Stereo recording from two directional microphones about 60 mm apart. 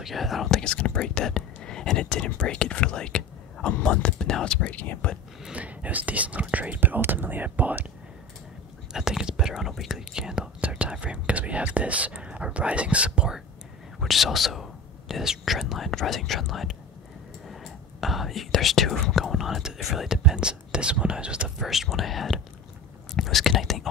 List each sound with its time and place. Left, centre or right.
0.0 s speech: centre
4.7 s speech: left
5.5 s speech: right
8.9 s speech: centre
13.9 s speech: centre
18.0 s speech: centre
21.5 s speech: centre